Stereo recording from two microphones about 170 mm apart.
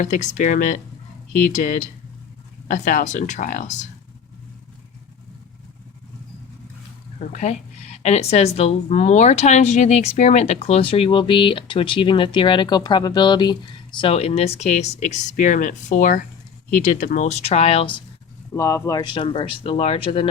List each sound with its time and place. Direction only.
0.0 s speech: 45° left (ahead or behind)
7.2 s speech: 40° left (ahead or behind)
18.5 s speech: 20° left (ahead or behind)